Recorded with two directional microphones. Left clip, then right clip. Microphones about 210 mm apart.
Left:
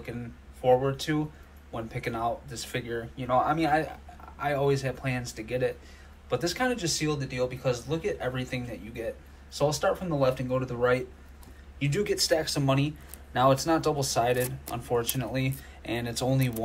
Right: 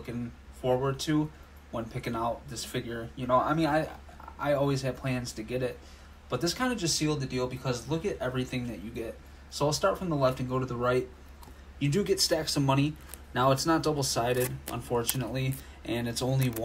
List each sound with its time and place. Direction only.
0.7 s speech: 15° right (ahead or behind)